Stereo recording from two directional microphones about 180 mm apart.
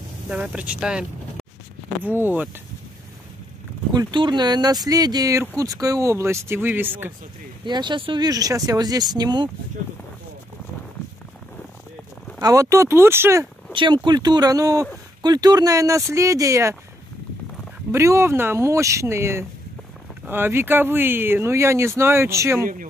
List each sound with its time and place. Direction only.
0.3 s speech: 5° right (ahead or behind)
2.0 s speech: 10° right (ahead or behind)
3.9 s speech: 25° right (ahead or behind)
7.6 s speech: 25° right (ahead or behind)
12.4 s speech: 20° right (ahead or behind)
13.7 s speech: 25° right (ahead or behind)
17.9 s speech: 15° right (ahead or behind)